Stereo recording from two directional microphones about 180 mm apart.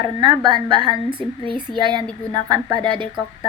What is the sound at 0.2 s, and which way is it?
Speech, 25° right (ahead or behind).